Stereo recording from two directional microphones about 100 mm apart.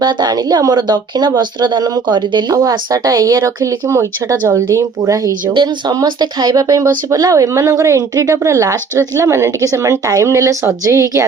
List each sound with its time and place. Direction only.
0.0 s speech: 45° right (ahead or behind)
2.6 s speech: 35° right (ahead or behind)